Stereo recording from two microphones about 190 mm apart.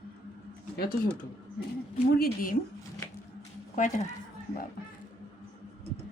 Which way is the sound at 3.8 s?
40° left (ahead or behind).